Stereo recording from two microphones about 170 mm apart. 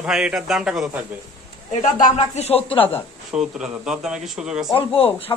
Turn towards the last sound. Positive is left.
turn(degrees=35)  # may be behind; listen again after turning